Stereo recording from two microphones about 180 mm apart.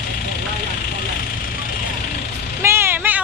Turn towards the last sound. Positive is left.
turn(degrees=-10)  # may be behind; listen again after turning